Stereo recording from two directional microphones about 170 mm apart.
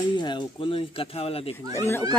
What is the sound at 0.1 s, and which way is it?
Speech, 25° left (ahead or behind).